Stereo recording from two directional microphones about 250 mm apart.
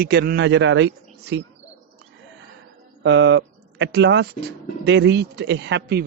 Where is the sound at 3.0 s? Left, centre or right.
Right.